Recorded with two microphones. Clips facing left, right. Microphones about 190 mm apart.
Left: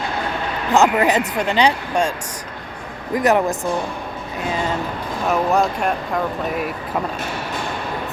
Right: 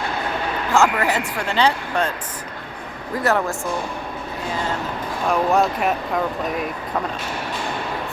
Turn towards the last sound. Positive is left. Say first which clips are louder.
# left 1 dB
turn(degrees=0)  # may be behind; listen again after turning